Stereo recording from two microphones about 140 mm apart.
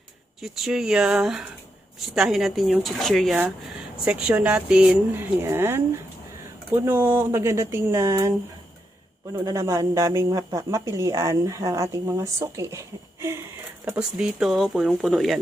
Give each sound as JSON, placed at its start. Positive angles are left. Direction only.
{"t": 0.4, "sound": "speech", "side_deg": 0}
{"t": 6.8, "sound": "speech", "side_deg": -15}
{"t": 9.3, "sound": "speech", "side_deg": -20}
{"t": 14.2, "sound": "speech", "side_deg": -5}